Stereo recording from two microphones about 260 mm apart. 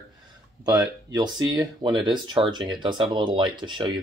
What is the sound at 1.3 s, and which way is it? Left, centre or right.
Speech, centre.